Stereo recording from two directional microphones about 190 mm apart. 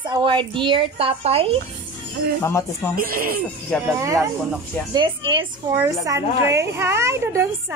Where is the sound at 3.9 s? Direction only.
15° right (ahead or behind).